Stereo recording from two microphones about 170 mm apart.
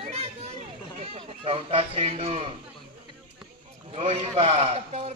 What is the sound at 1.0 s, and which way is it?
Speech, 35° right (ahead or behind).